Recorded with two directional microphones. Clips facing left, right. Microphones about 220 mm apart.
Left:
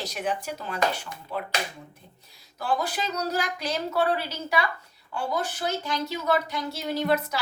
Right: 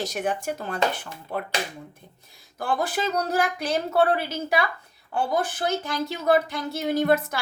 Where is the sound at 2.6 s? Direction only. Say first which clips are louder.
Right 2 dB; 50° right (ahead or behind).